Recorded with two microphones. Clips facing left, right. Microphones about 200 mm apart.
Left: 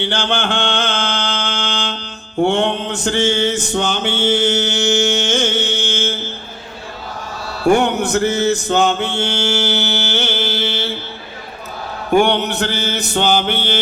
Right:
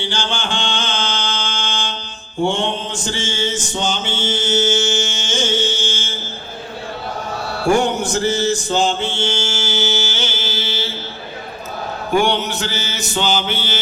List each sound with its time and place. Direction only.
0.0 s mantra: 60° left (ahead or behind)
7.7 s mantra: 60° left (ahead or behind)
12.2 s mantra: 60° left (ahead or behind)